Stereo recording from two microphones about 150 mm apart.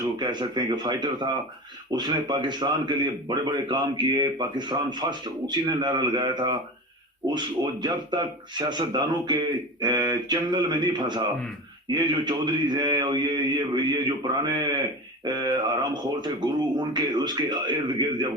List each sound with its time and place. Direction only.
0.0 s speech: 30° right (ahead or behind)